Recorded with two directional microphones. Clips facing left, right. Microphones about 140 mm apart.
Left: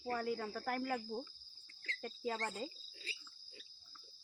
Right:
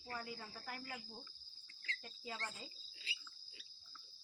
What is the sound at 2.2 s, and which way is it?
Cricket, 45° left (ahead or behind).